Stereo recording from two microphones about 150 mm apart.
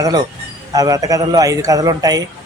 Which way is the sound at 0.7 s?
25° right (ahead or behind).